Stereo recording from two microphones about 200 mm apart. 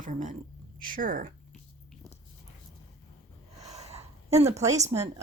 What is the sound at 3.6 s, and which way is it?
Snort, 30° right (ahead or behind).